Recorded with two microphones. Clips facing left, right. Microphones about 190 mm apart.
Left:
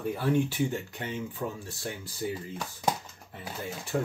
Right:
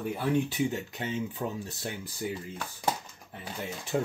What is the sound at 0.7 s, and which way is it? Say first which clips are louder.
Speech: right 1 dB; 20° right (ahead or behind).